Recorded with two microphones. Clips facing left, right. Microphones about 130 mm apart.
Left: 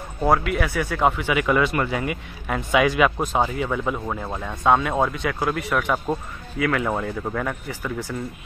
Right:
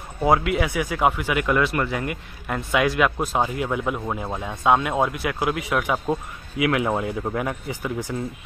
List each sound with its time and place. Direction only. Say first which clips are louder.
0.2 s speech: right 1 dB; 15° right (ahead or behind)